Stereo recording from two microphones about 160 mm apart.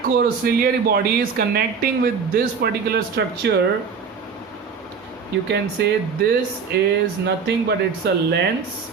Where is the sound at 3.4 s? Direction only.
90° right.